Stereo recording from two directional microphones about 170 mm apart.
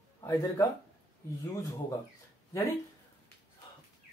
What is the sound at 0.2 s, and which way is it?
Speech, 15° left (ahead or behind).